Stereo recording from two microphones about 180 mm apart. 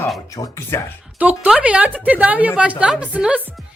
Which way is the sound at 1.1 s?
10° right (ahead or behind).